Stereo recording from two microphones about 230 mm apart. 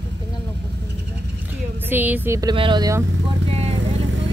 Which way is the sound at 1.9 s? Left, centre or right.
Centre.